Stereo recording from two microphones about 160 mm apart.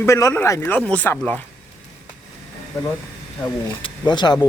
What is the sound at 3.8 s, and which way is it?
Speech, 30° left (ahead or behind).